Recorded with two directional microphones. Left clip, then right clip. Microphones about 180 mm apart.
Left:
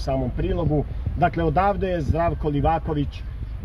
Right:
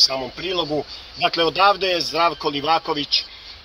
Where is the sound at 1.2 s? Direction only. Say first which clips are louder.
Right 4 dB; 10° right (ahead or behind).